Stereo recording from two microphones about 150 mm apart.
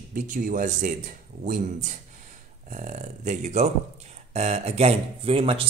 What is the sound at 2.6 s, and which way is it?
Speech, 55° right (ahead or behind).